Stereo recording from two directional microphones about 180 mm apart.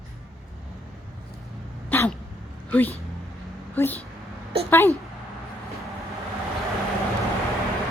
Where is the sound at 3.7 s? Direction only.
10° left (ahead or behind).